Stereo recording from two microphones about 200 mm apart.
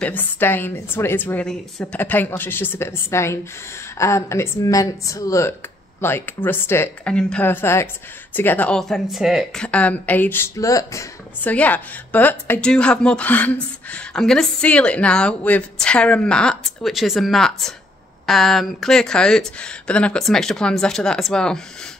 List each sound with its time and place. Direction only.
0.0 s a woman's voice: 10° left (ahead or behind)